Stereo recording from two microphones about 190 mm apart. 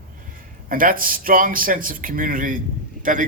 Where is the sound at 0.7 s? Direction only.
45° right (ahead or behind).